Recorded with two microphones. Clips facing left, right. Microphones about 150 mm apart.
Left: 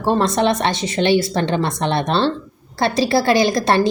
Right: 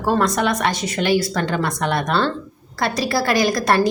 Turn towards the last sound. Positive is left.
turn(degrees=25)  # may be behind; listen again after turning